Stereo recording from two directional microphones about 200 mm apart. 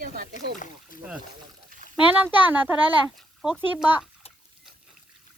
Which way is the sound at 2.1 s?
10° right (ahead or behind).